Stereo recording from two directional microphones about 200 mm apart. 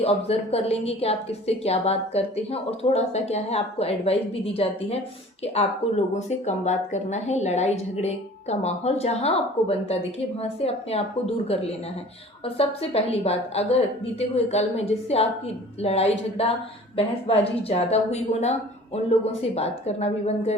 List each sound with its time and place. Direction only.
0.0 s a woman's voice: 30° left (ahead or behind)
6.1 s a woman's voice: 35° left (ahead or behind)
12.5 s a woman's voice: 30° left (ahead or behind)